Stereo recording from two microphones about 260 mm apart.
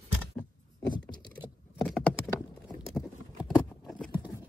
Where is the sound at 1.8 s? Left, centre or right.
Centre.